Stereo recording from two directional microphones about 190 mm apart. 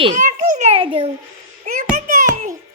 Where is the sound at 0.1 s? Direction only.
40° right (ahead or behind).